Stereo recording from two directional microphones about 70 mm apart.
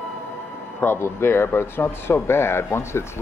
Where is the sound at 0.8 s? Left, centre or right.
Left.